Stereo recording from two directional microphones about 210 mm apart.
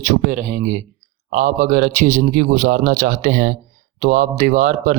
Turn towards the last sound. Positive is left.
turn(degrees=-40)  # may be behind; listen again after turning